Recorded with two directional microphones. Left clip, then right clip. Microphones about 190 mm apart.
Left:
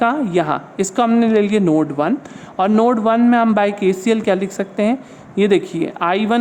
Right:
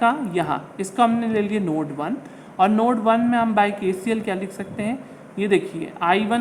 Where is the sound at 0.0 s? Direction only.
45° left (ahead or behind).